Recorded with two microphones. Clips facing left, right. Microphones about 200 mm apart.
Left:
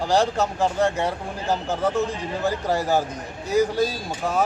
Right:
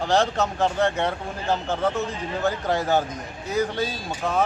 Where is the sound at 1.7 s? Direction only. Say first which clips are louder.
Left 2 dB; 5° left (ahead or behind).